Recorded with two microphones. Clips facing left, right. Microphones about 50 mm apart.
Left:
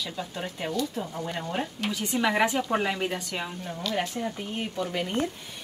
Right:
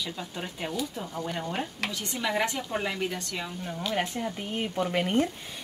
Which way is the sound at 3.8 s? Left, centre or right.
Centre.